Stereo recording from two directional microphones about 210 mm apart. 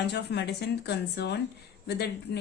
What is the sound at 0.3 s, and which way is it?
Speech, 55° left (ahead or behind).